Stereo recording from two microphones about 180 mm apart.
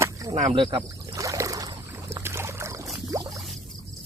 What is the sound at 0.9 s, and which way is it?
Boat, 20° right (ahead or behind).